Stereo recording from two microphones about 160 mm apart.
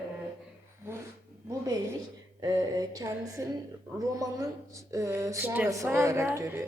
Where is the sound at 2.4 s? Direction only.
25° right (ahead or behind).